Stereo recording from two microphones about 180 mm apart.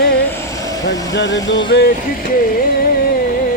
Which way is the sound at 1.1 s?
85° left.